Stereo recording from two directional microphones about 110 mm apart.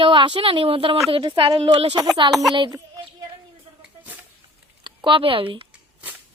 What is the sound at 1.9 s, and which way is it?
Speech, 40° right (ahead or behind).